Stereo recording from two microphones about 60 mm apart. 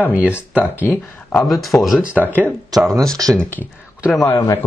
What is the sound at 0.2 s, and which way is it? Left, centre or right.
Speech, right.